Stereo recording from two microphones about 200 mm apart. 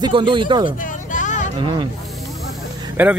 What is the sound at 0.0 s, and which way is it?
Speech, 25° right (ahead or behind).